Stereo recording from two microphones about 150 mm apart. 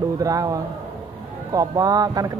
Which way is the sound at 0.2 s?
25° right (ahead or behind).